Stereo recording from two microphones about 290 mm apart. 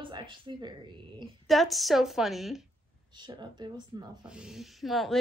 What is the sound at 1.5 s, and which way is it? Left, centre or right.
Speech, centre.